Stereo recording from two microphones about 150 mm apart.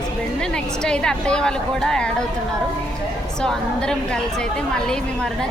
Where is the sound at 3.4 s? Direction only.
5° left (ahead or behind).